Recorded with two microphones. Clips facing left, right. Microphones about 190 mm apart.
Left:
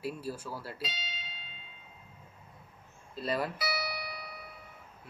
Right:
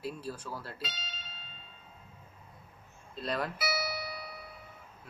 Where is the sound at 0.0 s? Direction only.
5° left (ahead or behind).